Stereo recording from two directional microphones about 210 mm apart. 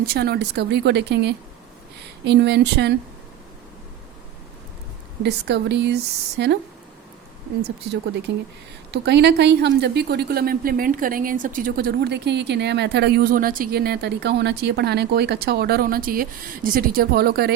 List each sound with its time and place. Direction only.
0.0 s a woman's voice: 50° right (ahead or behind)
5.2 s a woman's voice: 55° right (ahead or behind)
7.6 s a woman's voice: 50° right (ahead or behind)